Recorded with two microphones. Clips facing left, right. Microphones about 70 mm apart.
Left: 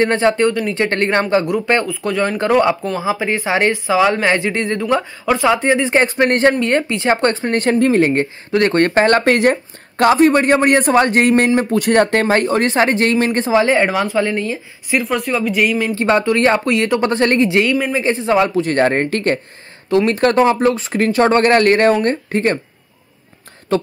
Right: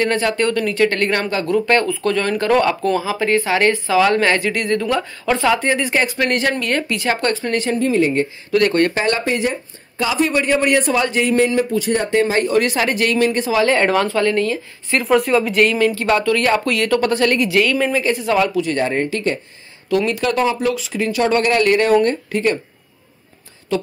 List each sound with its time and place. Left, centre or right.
0.0 s speech: left
1.3 s speech: centre
1.9 s speech: centre; by 7.6 s left
7.6 s speech: left
8.5 s speech: left
9.2 s speech: left
13.6 s speech: centre
15.0 s speech: centre
15.9 s speech: left
18.6 s speech: left
23.7 s a woman's voice: left